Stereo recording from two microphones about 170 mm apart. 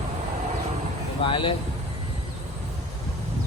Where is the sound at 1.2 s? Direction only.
30° left (ahead or behind).